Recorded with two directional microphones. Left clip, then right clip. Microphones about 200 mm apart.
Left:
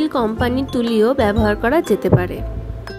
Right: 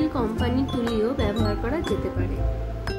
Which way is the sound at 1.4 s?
45° left (ahead or behind).